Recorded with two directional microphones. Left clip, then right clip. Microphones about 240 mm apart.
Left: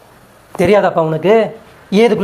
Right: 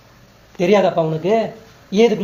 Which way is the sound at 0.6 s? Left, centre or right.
Centre.